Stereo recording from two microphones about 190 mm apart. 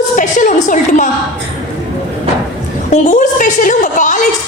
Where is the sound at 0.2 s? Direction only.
45° left (ahead or behind).